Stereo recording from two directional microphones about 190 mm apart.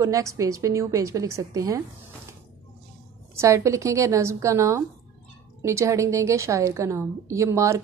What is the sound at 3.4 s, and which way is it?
A woman's voice, 15° right (ahead or behind).